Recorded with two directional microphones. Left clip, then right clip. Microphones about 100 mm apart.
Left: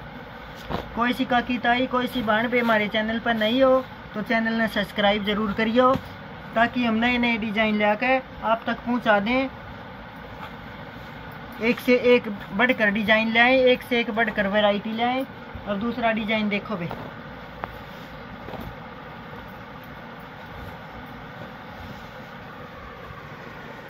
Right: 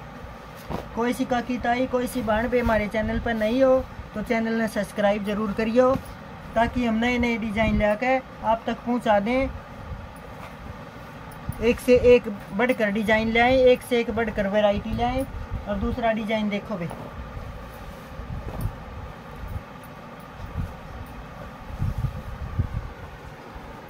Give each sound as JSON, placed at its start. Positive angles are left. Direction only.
{"t": 0.9, "sound": "speech", "side_deg": -20}
{"t": 8.6, "sound": "speech", "side_deg": -45}
{"t": 11.6, "sound": "speech", "side_deg": -35}
{"t": 12.5, "sound": "speech", "side_deg": -25}